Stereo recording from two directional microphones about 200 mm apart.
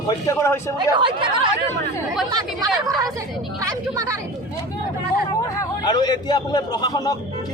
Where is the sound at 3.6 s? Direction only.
15° right (ahead or behind).